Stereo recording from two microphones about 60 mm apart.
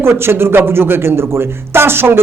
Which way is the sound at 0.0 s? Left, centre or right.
Right.